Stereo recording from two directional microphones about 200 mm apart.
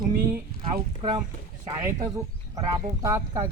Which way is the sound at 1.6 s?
15° right (ahead or behind).